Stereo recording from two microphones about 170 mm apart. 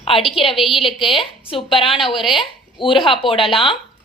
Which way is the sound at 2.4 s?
30° left (ahead or behind).